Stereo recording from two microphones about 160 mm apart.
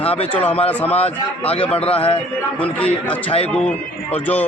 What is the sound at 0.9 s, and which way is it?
A man's voice, 40° left (ahead or behind).